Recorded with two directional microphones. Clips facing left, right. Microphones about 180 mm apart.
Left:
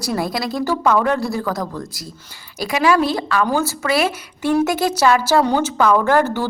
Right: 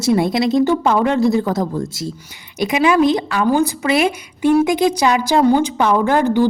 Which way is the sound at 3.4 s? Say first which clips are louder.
Right 4 dB; 15° right (ahead or behind).